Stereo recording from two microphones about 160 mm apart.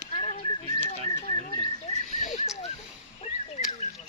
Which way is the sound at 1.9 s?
40° left (ahead or behind).